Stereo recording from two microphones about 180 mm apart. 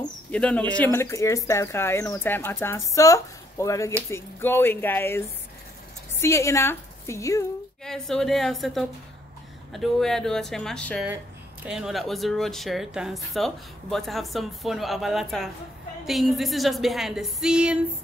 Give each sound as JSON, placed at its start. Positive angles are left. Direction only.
{"t": 0.3, "sound": "a woman's voice", "side_deg": 5}
{"t": 7.8, "sound": "speech", "side_deg": 0}